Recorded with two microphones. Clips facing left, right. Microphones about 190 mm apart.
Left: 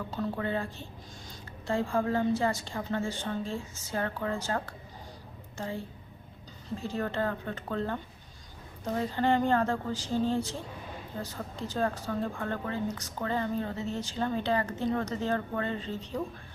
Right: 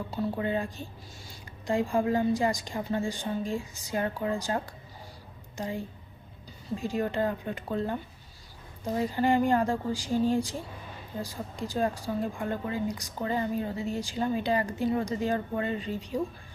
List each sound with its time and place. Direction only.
0.1 s a woman's voice: 15° right (ahead or behind)